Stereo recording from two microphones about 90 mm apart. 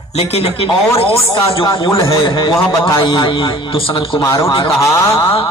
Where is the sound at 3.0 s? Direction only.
65° left (ahead or behind); by 4.2 s 80° left.